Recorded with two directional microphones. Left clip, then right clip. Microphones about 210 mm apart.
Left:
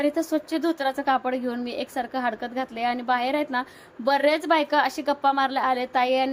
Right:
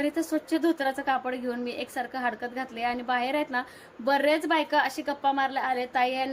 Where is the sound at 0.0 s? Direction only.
15° left (ahead or behind).